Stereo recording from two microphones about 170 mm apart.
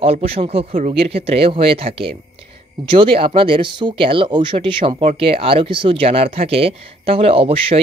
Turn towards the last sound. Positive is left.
turn(degrees=-35)  # may be behind; listen again after turning